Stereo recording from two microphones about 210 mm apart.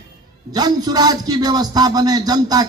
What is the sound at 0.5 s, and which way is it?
A man's voice, 20° right (ahead or behind).